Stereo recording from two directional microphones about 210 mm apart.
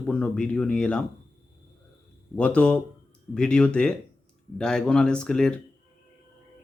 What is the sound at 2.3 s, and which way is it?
Speech, 5° left (ahead or behind).